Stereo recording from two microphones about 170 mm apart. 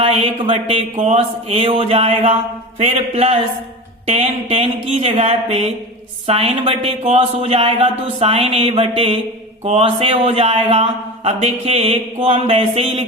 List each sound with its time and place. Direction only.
0.0 s speech: 35° right (ahead or behind)